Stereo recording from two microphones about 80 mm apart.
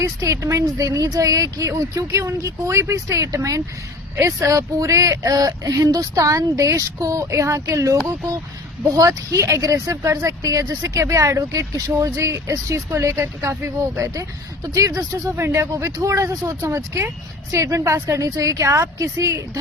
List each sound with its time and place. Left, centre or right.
0.0 s speech: right